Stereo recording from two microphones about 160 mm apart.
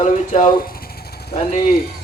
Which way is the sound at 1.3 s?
40° left (ahead or behind).